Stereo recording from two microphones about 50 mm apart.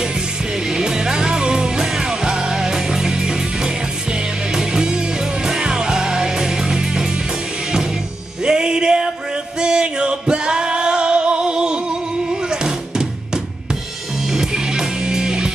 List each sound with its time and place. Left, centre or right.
0.7 s music: centre
8.5 s music: centre